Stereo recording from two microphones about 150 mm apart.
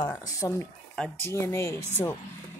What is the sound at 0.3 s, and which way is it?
Speech, 20° left (ahead or behind).